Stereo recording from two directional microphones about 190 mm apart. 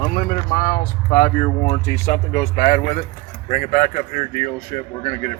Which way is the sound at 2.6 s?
40° left (ahead or behind).